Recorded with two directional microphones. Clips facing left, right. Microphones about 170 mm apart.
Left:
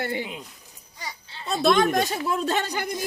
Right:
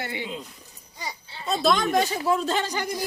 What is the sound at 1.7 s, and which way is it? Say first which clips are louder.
A woman's voice: left 2 dB; 55° left (ahead or behind).